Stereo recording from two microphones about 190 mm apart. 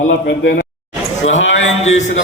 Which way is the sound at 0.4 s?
75° left (ahead or behind).